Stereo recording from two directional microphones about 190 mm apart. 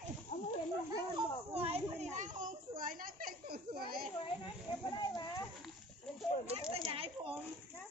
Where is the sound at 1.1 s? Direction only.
30° right (ahead or behind); by 3.8 s 50° right (ahead or behind).